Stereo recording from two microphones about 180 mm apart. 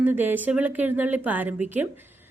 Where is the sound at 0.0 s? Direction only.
10° right (ahead or behind).